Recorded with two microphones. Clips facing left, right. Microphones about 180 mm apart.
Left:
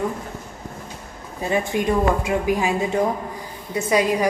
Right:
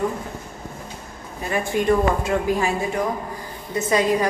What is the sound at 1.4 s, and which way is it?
A woman's voice, 20° left (ahead or behind).